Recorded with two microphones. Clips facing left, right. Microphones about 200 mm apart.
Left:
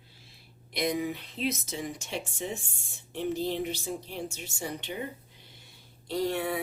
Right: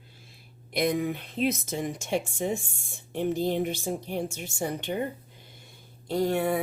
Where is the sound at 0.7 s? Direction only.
50° right (ahead or behind).